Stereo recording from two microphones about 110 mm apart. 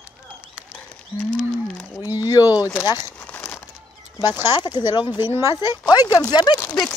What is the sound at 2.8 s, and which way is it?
Speech, 35° left (ahead or behind).